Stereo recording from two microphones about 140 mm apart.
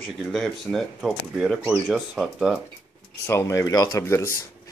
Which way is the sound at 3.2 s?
20° left (ahead or behind).